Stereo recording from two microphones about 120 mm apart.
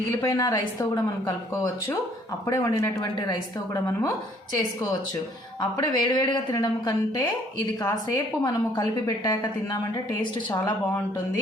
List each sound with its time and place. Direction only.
0.2 s a woman's voice: 30° left (ahead or behind)
2.5 s a woman's voice: 30° left (ahead or behind)
5.5 s a woman's voice: 35° left (ahead or behind)